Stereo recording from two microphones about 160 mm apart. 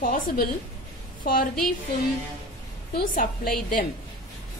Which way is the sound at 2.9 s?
60° left (ahead or behind).